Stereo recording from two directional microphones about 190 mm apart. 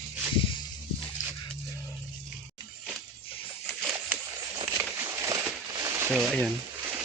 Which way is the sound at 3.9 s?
15° right (ahead or behind).